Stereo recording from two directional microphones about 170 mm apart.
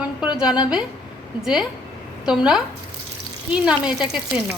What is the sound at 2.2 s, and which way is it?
Speech, 5° right (ahead or behind).